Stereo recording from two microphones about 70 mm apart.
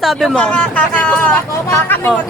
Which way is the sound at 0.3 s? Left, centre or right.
Centre.